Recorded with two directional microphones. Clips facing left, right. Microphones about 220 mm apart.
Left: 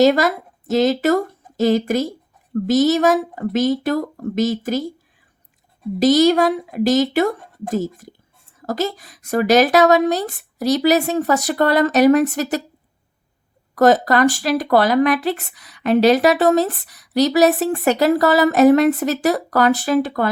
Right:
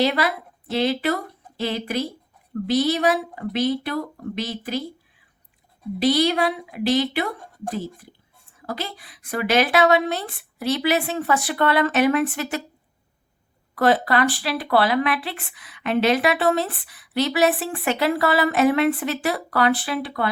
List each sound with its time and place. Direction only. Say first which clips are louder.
0.0 s a woman's voice: left 7 dB; 45° left (ahead or behind)
6.0 s a woman's voice: left 6 dB; 45° left (ahead or behind)
13.7 s speech: left 5 dB; 40° left (ahead or behind)